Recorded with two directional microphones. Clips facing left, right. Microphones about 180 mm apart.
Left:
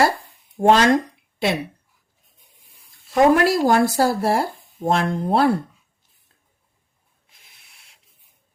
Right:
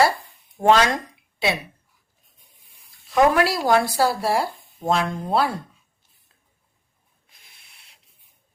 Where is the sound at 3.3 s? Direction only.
45° left (ahead or behind).